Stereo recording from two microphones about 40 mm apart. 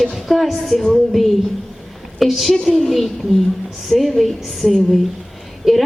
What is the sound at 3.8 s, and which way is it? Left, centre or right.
Speech, centre.